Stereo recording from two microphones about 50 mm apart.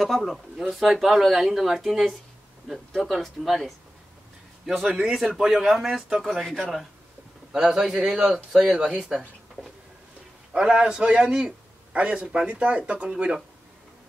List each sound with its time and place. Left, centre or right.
0.0 s speech: centre
6.4 s speech: centre
7.5 s speech: centre
10.5 s a man's voice: centre